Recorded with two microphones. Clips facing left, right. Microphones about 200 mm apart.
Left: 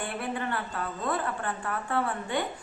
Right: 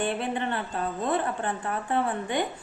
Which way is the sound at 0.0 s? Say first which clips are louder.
Right 4 dB; 25° right (ahead or behind).